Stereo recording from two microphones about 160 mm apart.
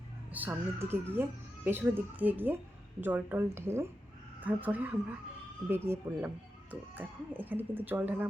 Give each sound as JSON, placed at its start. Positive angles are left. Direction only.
{"t": 0.3, "sound": "speech", "side_deg": -10}